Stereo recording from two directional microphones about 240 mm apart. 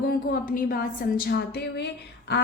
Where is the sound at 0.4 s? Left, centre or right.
Left.